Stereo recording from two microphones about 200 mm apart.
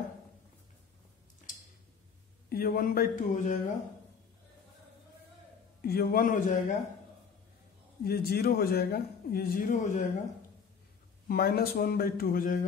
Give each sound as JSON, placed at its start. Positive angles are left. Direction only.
{"t": 2.5, "sound": "a man's voice", "side_deg": 50}
{"t": 5.8, "sound": "a man's voice", "side_deg": 50}
{"t": 8.0, "sound": "a man's voice", "side_deg": 50}
{"t": 11.2, "sound": "a man's voice", "side_deg": 50}